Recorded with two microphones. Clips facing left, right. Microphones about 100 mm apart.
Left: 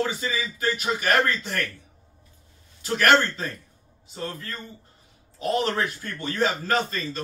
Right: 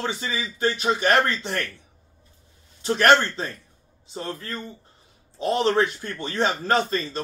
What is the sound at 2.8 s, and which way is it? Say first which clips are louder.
A man's voice: right 2 dB; 30° right (ahead or behind).